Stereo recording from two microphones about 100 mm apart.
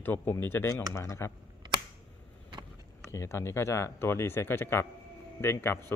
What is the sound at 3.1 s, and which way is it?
Speech, 25° left (ahead or behind).